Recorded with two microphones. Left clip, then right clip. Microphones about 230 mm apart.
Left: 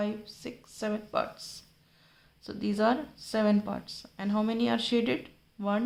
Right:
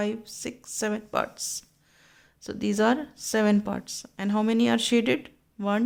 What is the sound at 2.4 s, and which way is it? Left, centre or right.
Speech, right.